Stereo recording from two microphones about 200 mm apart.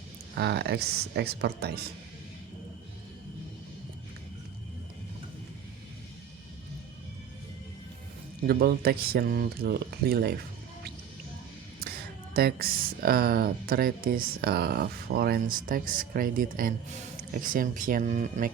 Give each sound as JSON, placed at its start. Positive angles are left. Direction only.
{"t": 0.3, "sound": "speech", "side_deg": -55}
{"t": 8.4, "sound": "speech", "side_deg": -50}
{"t": 11.9, "sound": "speech", "side_deg": -50}